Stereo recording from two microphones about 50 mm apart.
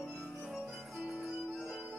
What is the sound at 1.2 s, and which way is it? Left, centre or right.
Music, centre.